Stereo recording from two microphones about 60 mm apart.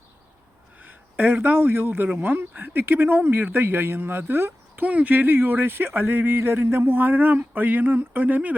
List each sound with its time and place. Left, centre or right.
0.8 s speech: right
4.9 s speech: right